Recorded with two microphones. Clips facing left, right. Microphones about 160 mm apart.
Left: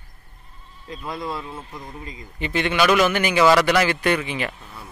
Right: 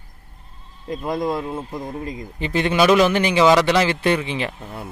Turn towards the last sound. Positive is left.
turn(degrees=-55)  # may be behind; listen again after turning